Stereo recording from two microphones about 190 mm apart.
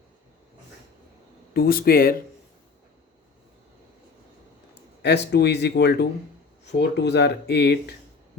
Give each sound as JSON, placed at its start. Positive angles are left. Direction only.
{"t": 1.5, "sound": "speech", "side_deg": 50}
{"t": 5.0, "sound": "speech", "side_deg": 65}